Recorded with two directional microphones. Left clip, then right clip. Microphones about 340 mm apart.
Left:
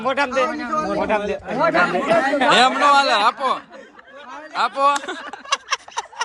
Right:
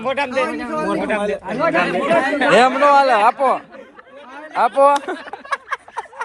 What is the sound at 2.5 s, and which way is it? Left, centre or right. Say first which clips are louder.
A man's voice: right 3 dB; centre.